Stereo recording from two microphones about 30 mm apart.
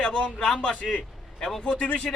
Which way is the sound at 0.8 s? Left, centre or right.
Left.